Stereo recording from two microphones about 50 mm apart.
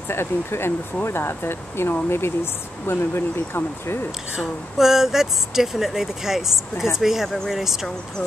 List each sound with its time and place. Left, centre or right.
0.1 s speech: left
4.4 s speech: centre